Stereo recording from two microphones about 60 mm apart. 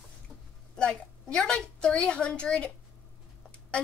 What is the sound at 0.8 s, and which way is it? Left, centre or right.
A woman's voice, centre.